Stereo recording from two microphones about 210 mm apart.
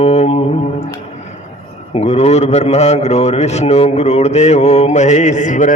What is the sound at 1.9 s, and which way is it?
A man's voice, 30° left (ahead or behind).